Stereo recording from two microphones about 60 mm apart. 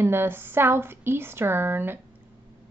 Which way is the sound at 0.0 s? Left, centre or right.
Right.